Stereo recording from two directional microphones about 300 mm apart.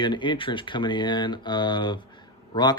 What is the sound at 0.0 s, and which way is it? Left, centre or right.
Speech, centre.